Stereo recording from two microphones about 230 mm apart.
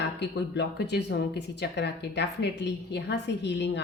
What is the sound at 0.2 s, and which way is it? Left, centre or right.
Speech, left.